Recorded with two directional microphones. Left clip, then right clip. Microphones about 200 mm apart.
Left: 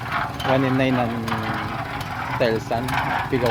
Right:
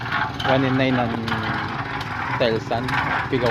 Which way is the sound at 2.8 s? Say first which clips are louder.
Right 2 dB; 55° left (ahead or behind).